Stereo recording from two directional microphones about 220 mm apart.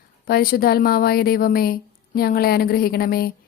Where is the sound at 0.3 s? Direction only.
45° left (ahead or behind).